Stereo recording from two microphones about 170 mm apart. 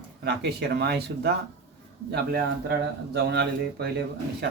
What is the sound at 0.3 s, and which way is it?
Speech, 80° right.